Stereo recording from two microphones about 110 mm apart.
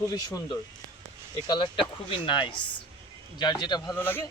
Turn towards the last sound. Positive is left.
turn(degrees=20)  # may be behind; listen again after turning